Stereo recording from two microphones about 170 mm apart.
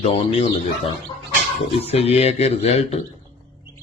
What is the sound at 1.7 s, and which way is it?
A man's voice, 35° left (ahead or behind).